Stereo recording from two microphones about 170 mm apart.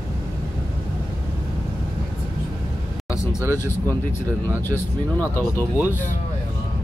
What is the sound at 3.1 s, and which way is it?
Speech, 20° left (ahead or behind).